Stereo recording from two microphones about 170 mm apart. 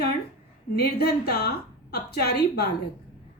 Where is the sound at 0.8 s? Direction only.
70° left (ahead or behind).